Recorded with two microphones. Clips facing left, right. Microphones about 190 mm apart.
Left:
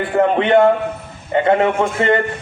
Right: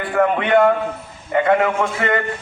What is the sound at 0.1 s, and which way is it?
Speech, 25° left (ahead or behind).